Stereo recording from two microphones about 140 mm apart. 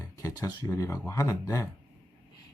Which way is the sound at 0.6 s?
20° left (ahead or behind).